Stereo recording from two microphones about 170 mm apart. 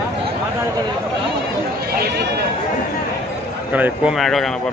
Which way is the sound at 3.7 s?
10° right (ahead or behind).